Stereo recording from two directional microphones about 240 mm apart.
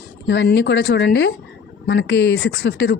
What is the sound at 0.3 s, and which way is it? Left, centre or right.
A woman's voice, left.